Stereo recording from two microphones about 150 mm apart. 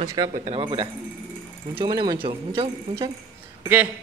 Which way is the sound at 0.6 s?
30° right (ahead or behind).